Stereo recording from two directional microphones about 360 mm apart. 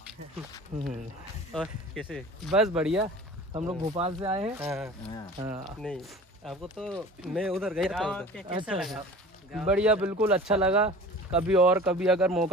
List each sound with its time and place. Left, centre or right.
0.7 s speech: centre
1.5 s speech: centre
5.8 s speech: centre